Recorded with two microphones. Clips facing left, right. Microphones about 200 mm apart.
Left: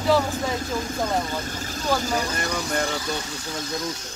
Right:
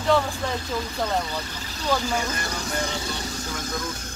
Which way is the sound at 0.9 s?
50° left (ahead or behind).